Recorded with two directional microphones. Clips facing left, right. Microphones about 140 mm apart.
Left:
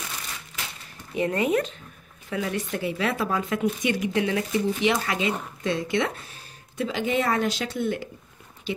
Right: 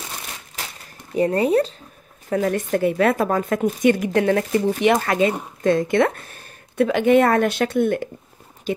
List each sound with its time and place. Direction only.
1.1 s speech: 35° right (ahead or behind)